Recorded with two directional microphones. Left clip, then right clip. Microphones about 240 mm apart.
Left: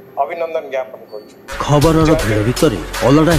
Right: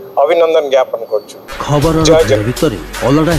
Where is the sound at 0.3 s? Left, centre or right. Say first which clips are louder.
Right 11 dB; right.